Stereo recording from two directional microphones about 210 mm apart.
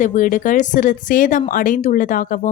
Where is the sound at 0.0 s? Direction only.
40° left (ahead or behind).